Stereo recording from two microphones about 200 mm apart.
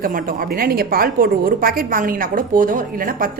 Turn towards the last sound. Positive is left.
turn(degrees=-45)  # may be behind; listen again after turning